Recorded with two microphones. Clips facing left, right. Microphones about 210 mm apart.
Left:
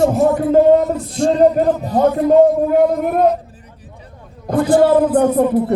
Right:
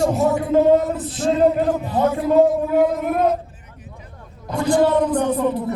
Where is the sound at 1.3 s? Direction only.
40° left (ahead or behind).